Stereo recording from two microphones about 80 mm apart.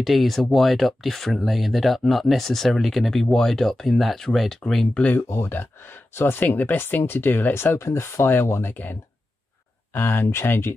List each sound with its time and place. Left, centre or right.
0.0 s speech: centre
5.3 s speech: left
9.9 s speech: left